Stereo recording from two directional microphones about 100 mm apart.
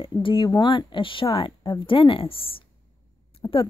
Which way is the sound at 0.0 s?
60° left (ahead or behind).